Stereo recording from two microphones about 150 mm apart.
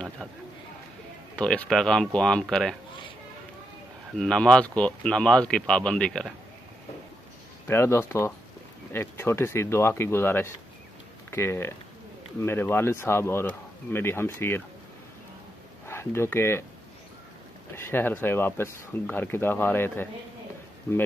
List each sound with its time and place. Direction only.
1.3 s speech: 5° left (ahead or behind)
4.1 s speech: 5° left (ahead or behind)
7.6 s speech: 15° left (ahead or behind)
15.9 s speech: 15° left (ahead or behind)
17.7 s speech: 15° left (ahead or behind)